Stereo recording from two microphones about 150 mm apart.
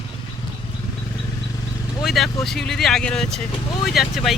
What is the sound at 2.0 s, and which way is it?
Speech, centre (ahead or behind).